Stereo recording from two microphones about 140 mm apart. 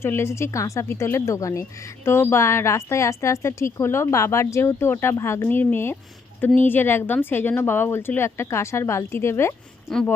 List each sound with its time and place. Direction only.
0.0 s speech: 15° left (ahead or behind)